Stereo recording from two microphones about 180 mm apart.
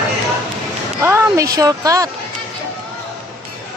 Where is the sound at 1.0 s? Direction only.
15° right (ahead or behind).